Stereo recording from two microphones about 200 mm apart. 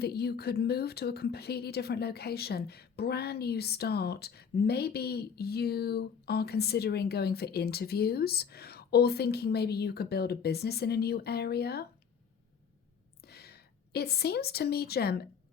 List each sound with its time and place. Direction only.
0.0 s speech: 55° left (ahead or behind)
13.2 s a woman's voice: 50° left (ahead or behind)